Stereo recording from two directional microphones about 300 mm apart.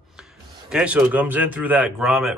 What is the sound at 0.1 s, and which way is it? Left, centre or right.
A man's voice, centre.